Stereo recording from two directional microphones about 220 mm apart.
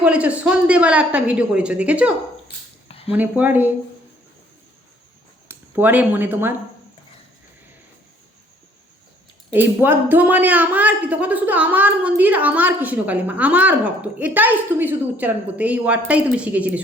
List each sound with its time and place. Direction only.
0.0 s speech: 5° right (ahead or behind)
5.5 s speech: 10° right (ahead or behind)
9.5 s speech: 10° right (ahead or behind)